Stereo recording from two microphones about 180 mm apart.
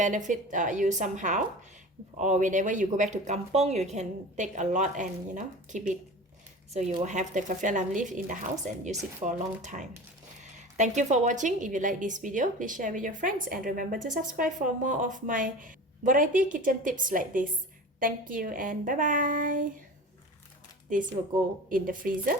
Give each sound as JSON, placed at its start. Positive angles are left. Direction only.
{"t": 0.0, "sound": "a woman's voice", "side_deg": -45}
{"t": 21.7, "sound": "a woman's voice", "side_deg": -50}